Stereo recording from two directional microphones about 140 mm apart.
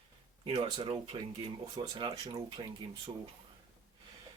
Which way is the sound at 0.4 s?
40° right (ahead or behind).